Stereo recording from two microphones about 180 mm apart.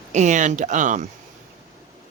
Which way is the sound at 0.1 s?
40° right (ahead or behind).